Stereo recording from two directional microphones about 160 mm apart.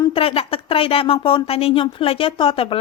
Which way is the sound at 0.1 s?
35° left (ahead or behind).